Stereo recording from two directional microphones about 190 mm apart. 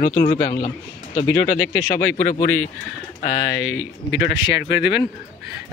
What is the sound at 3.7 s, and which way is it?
Speech, 80° left.